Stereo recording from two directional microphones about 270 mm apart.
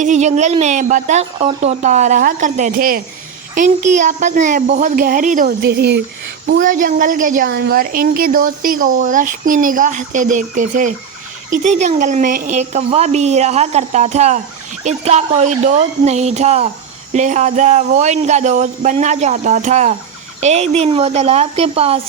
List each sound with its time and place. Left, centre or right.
0.0 s speech: right